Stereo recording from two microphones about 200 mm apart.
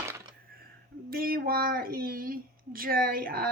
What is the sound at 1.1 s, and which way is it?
Speech, 45° right (ahead or behind).